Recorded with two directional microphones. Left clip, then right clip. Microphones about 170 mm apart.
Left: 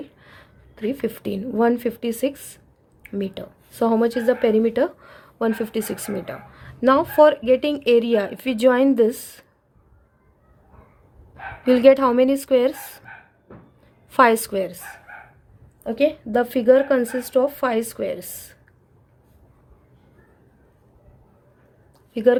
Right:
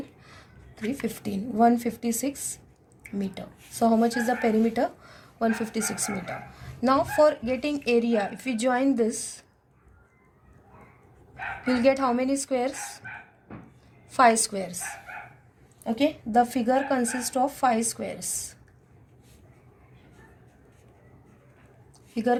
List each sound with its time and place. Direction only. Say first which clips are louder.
0.2 s a sound: left 3 dB; 60° left (ahead or behind)
1.0 s a woman's voice: left 6 dB; 60° left (ahead or behind)
11.6 s a woman's voice: left 9 dB; 55° left (ahead or behind)
14.1 s a woman's voice: left 4 dB; 55° left (ahead or behind)
16.0 s a woman's voice: left 3 dB; 60° left (ahead or behind)
22.1 s a woman's voice: left 8 dB; 60° left (ahead or behind)